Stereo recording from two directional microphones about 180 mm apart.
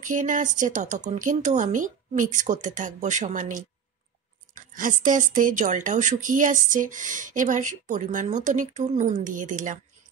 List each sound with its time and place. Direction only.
0.1 s speech: 45° right (ahead or behind)